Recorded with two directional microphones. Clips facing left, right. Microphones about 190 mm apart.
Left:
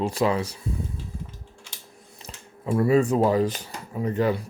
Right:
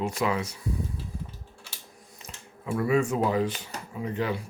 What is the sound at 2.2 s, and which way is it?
Speech, 30° left (ahead or behind).